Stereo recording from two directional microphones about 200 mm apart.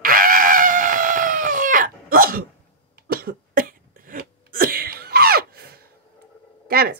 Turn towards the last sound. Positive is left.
turn(degrees=-50)  # may be behind; listen again after turning